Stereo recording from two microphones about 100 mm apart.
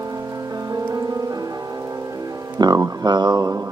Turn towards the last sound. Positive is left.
turn(degrees=-40)  # may be behind; listen again after turning